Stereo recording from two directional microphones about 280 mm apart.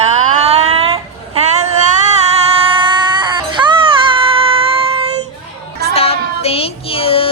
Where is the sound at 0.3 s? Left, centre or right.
Right.